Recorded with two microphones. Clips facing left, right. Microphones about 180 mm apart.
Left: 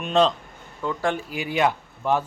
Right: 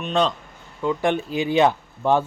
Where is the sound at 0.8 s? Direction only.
20° right (ahead or behind).